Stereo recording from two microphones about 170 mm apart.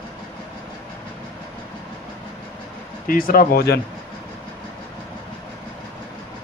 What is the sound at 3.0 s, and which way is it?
Speech, 55° left (ahead or behind).